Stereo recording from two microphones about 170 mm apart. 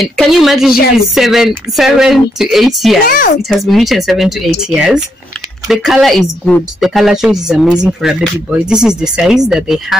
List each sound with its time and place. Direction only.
0.0 s a woman's voice: centre (ahead or behind)
3.1 s speech: 55° left (ahead or behind)
3.4 s a woman's voice: centre (ahead or behind)